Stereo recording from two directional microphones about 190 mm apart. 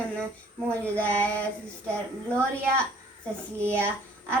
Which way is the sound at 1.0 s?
5° left (ahead or behind).